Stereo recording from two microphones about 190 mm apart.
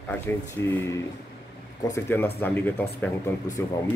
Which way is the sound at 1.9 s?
10° left (ahead or behind).